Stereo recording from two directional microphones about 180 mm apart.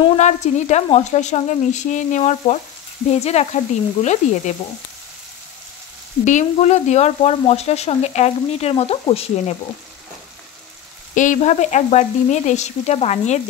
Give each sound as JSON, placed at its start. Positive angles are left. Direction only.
{"t": 0.2, "sound": "speech", "side_deg": 40}
{"t": 6.2, "sound": "speech", "side_deg": 40}
{"t": 11.1, "sound": "speech", "side_deg": 45}